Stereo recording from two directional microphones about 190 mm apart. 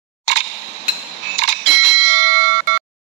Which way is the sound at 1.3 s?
65° right (ahead or behind).